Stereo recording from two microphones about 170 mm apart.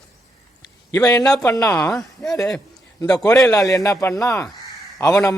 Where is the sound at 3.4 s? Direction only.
20° left (ahead or behind).